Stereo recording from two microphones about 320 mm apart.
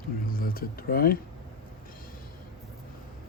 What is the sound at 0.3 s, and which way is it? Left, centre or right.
Speech, left.